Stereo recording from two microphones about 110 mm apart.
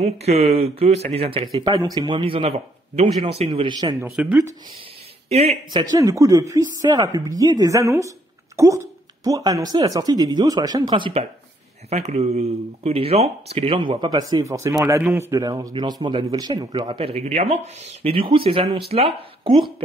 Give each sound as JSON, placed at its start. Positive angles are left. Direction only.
{"t": 0.0, "sound": "speech", "side_deg": -70}
{"t": 1.6, "sound": "speech", "side_deg": -35}
{"t": 4.0, "sound": "speech", "side_deg": -15}
{"t": 5.3, "sound": "speech", "side_deg": -70}
{"t": 5.7, "sound": "speech", "side_deg": -45}
{"t": 5.9, "sound": "speech", "side_deg": -30}
{"t": 11.9, "sound": "speech", "side_deg": -85}
{"t": 13.7, "sound": "speech", "side_deg": -45}
{"t": 14.4, "sound": "speech", "side_deg": -30}
{"t": 15.7, "sound": "speech", "side_deg": -45}
{"t": 17.0, "sound": "speech", "side_deg": -70}
{"t": 18.0, "sound": "speech", "side_deg": -55}